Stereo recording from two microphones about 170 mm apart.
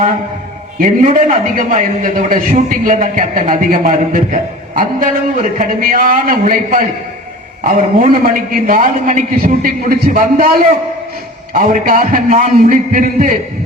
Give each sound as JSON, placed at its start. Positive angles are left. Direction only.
{"t": 0.8, "sound": "a man's voice", "side_deg": -50}